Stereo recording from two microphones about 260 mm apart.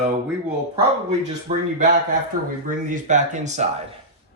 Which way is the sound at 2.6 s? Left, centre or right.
Right.